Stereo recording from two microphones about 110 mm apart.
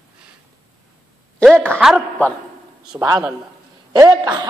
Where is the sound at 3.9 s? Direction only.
40° right (ahead or behind).